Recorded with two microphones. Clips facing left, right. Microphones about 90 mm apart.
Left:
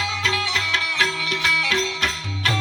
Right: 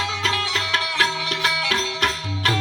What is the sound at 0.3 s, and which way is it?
Music, 45° right (ahead or behind).